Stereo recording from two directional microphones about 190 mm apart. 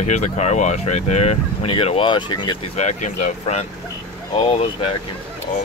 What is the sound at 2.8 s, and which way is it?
Speech, 40° left (ahead or behind).